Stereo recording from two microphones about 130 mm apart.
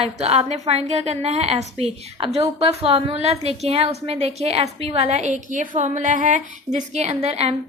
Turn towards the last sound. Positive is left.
turn(degrees=-50)  # may be behind; listen again after turning